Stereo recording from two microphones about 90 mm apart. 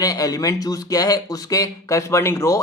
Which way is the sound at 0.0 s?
45° left (ahead or behind).